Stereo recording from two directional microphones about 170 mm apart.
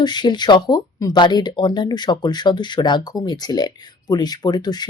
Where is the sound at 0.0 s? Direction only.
25° left (ahead or behind).